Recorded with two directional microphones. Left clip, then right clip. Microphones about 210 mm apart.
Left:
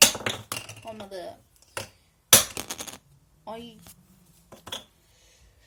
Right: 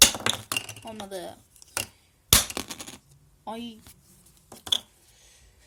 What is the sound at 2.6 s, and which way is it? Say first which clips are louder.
Typewriter: left 3 dB; 10° left (ahead or behind).